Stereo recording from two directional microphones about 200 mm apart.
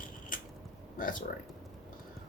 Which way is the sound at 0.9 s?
45° left (ahead or behind).